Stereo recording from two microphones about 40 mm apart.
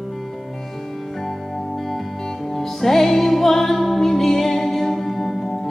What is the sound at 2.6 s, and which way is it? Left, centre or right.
Music, centre.